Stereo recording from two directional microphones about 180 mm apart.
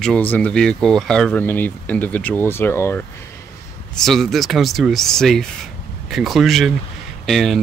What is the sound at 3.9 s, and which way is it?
Speech, centre (ahead or behind).